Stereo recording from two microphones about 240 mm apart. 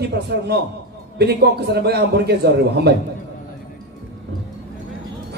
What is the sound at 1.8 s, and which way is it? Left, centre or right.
A man's voice, right.